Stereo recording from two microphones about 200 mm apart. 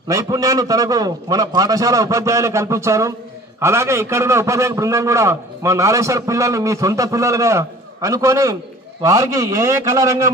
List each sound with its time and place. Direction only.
0.1 s a man's voice: 15° right (ahead or behind)